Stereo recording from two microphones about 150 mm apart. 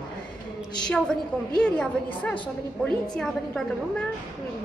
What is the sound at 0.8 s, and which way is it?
A woman's voice, 5° left (ahead or behind).